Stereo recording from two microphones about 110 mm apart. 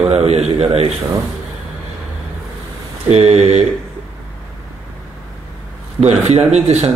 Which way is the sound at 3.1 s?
70° right (ahead or behind).